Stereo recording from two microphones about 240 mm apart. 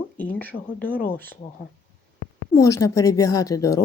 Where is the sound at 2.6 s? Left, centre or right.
Centre.